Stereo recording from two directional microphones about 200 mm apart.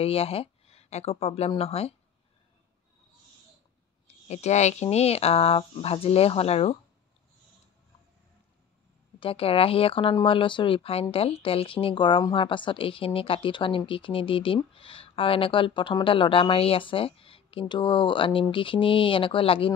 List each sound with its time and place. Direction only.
0.0 s speech: 30° left (ahead or behind)
4.3 s speech: 35° left (ahead or behind)
9.2 s speech: 30° left (ahead or behind)